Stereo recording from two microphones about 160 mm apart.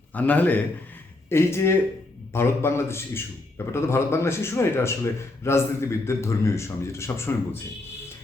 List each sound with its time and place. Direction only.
0.1 s a man's voice: 10° left (ahead or behind)